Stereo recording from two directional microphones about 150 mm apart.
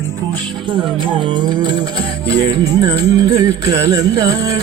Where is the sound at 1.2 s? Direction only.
30° right (ahead or behind).